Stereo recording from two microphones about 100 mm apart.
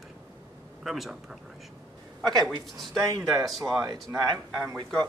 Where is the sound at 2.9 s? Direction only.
35° right (ahead or behind).